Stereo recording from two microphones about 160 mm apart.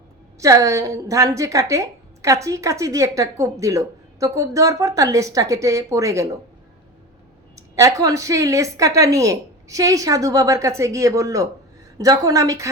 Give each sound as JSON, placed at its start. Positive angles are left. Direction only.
{"t": 0.3, "sound": "a woman's voice", "side_deg": -20}
{"t": 7.5, "sound": "a woman's voice", "side_deg": -20}